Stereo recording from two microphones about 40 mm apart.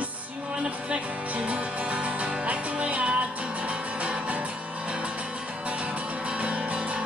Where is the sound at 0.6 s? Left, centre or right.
Right.